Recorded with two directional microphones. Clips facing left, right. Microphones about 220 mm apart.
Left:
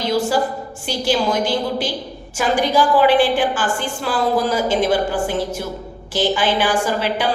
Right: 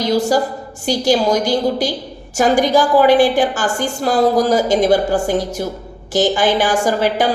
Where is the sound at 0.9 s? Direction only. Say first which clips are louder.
Right 5 dB; 40° right (ahead or behind).